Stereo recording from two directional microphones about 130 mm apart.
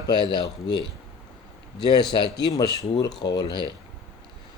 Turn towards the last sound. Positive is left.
turn(degrees=35)  # may be behind; listen again after turning